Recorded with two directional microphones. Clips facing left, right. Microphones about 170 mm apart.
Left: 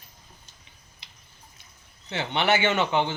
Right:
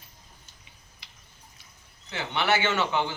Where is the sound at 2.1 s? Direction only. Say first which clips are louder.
Left 2 dB; 20° left (ahead or behind).